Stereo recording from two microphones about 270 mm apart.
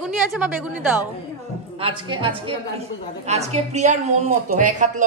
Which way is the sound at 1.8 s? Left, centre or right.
Centre.